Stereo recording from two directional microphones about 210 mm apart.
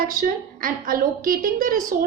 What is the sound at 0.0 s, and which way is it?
A woman's voice, 40° right (ahead or behind).